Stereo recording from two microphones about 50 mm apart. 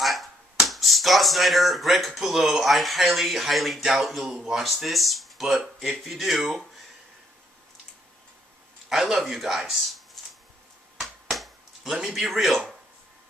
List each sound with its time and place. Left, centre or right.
0.0 s speech: centre
8.8 s speech: centre
11.0 s a sound: centre
12.2 s speech: centre